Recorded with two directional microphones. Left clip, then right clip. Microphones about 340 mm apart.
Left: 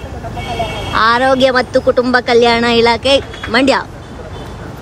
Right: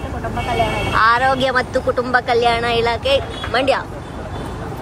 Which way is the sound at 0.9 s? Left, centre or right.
Centre.